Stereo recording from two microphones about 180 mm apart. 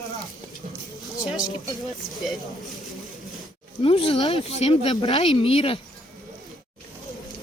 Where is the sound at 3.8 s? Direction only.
30° left (ahead or behind).